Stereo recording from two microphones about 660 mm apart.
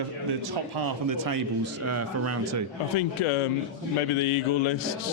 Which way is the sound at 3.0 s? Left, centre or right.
Left.